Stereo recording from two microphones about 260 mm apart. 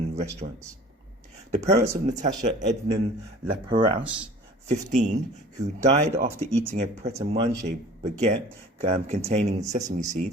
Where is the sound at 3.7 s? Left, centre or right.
Centre.